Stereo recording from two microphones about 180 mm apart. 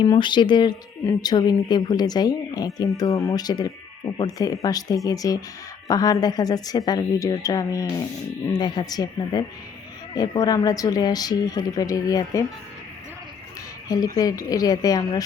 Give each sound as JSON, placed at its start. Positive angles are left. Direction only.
{"t": 0.0, "sound": "a woman's voice", "side_deg": 25}
{"t": 13.8, "sound": "a woman's voice", "side_deg": 20}